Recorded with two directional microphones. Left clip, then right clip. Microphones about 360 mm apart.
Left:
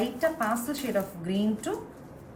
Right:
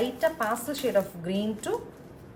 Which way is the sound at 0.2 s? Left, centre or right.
Right.